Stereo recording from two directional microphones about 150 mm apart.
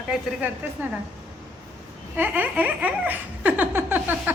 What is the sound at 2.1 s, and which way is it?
Laughter, 10° right (ahead or behind).